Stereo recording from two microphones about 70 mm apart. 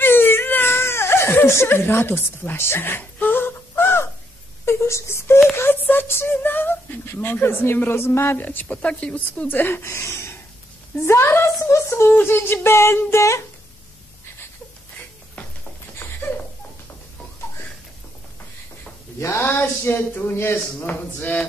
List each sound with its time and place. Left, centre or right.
0.0 s a sound: left
4.6 s speech: left
8.5 s speech: left
9.5 s speech: left
11.2 s a sound: left
12.2 s speech: left
19.1 s a sound: left
19.4 s speech: left
21.2 s speech: left